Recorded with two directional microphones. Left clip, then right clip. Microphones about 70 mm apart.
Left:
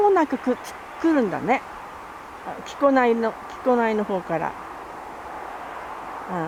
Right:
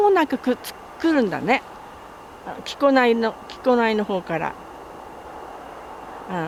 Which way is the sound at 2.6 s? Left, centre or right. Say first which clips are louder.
Right 1 dB; right.